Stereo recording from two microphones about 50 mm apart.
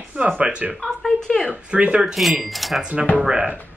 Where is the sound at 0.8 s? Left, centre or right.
Centre.